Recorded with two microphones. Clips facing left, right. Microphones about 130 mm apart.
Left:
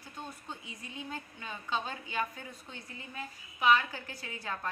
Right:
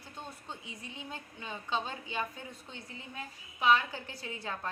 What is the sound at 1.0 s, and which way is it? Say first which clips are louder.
A woman's voice: left 5 dB; 25° right (ahead or behind).